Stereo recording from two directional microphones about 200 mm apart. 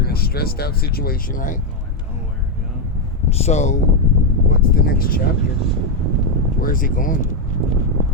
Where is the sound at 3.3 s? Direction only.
30° left (ahead or behind).